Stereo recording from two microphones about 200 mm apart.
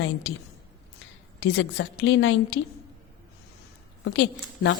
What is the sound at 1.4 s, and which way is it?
A woman's voice, 65° left (ahead or behind).